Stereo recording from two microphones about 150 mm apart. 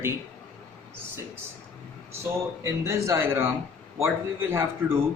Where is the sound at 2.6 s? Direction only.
20° right (ahead or behind).